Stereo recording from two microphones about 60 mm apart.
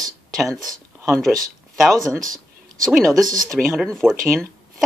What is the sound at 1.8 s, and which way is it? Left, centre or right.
Speech, centre.